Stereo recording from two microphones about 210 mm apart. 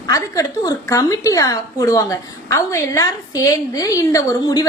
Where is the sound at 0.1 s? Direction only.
15° left (ahead or behind).